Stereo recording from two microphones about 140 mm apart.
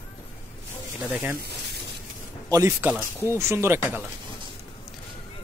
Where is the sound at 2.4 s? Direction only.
20° right (ahead or behind).